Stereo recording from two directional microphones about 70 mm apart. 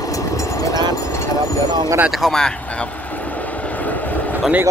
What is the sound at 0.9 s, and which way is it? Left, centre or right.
Vehicle, left.